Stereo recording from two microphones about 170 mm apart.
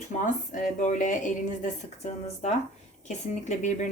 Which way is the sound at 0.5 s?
50° left (ahead or behind).